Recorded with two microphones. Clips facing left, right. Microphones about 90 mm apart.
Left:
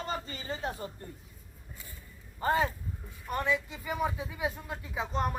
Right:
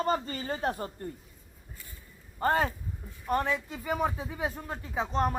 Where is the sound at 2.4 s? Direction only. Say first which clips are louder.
Right 2 dB; 45° right (ahead or behind).